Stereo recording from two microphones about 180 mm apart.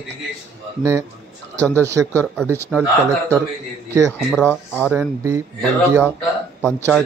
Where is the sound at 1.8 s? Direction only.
15° right (ahead or behind).